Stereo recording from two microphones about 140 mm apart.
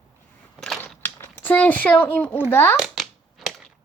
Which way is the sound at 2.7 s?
Centre (ahead or behind).